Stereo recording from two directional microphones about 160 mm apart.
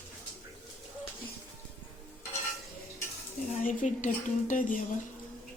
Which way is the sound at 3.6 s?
55° left (ahead or behind).